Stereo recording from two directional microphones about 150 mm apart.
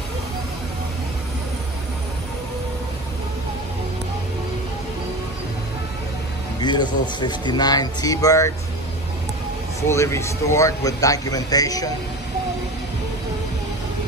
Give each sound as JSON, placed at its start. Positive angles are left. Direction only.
{"t": 6.6, "sound": "a man's voice", "side_deg": 30}
{"t": 9.8, "sound": "a man's voice", "side_deg": 20}